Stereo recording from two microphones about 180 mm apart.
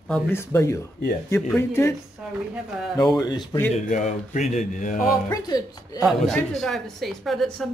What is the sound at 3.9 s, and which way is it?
Speech, 45° left (ahead or behind).